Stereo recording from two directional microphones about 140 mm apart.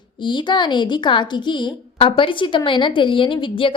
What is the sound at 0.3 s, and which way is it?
A woman's voice, 35° left (ahead or behind).